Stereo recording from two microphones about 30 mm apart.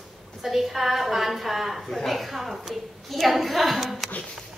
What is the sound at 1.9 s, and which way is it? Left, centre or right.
A woman's voice, centre.